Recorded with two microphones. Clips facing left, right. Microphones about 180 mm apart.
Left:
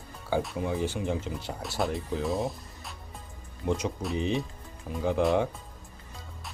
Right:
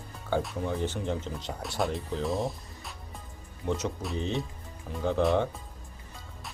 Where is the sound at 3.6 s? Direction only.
10° left (ahead or behind).